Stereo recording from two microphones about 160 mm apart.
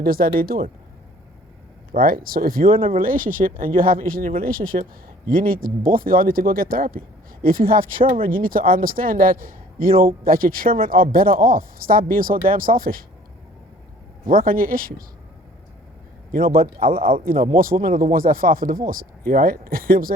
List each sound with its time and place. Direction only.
0.0 s speech: 65° right (ahead or behind)
1.9 s speech: 65° right (ahead or behind)
2.7 s speech: 35° right (ahead or behind)
3.0 s speech: 60° right (ahead or behind)
14.3 s speech: 65° right (ahead or behind)
16.3 s speech: 65° right (ahead or behind)